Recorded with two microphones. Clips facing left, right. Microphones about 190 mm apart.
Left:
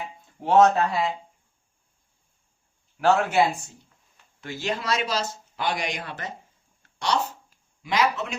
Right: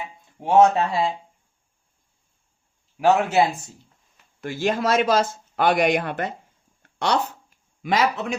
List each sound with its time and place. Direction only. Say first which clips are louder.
0.6 s speech: right 3 dB; 30° right (ahead or behind)
3.0 s speech: right 2 dB; 15° right (ahead or behind)
4.4 s speech: right 6 dB; 50° right (ahead or behind)
7.8 s speech: right 2 dB; 55° right (ahead or behind)